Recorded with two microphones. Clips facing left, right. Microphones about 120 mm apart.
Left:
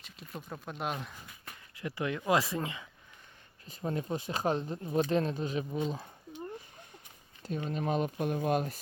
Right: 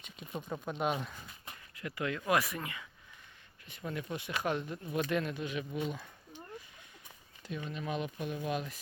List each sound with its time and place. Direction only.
0.0 s speech: centre (ahead or behind)
1.7 s speech: 25° left (ahead or behind)
7.4 s speech: 40° left (ahead or behind)